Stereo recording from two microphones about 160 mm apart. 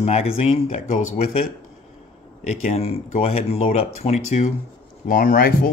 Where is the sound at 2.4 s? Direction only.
45° left (ahead or behind).